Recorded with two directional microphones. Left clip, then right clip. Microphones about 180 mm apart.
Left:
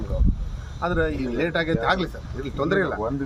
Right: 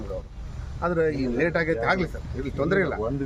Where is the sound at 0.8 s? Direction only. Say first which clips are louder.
Even; 20° right (ahead or behind).